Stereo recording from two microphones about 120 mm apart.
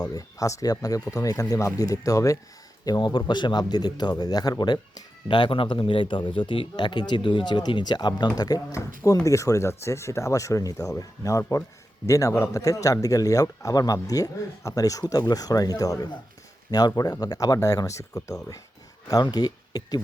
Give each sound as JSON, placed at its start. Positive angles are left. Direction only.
{"t": 0.0, "sound": "a man's voice", "side_deg": 30}